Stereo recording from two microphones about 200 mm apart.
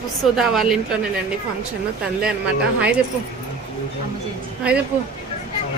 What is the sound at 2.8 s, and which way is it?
Speech, 5° right (ahead or behind).